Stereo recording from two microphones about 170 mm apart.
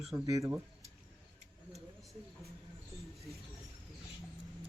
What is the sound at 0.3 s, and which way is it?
Speech, 20° right (ahead or behind).